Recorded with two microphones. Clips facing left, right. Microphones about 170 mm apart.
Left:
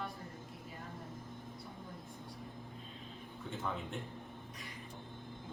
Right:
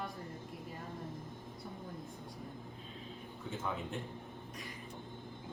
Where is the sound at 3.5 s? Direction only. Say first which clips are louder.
Right 1 dB; centre (ahead or behind).